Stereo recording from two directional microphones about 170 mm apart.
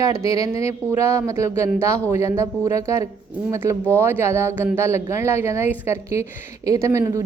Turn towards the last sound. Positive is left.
turn(degrees=-20)  # may be behind; listen again after turning